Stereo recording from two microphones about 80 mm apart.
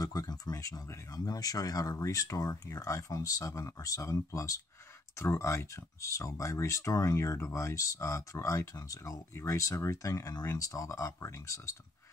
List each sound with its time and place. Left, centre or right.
0.0 s speech: left